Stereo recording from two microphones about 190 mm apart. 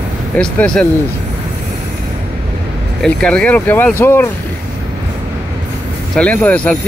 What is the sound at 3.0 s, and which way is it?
Speech, 5° left (ahead or behind).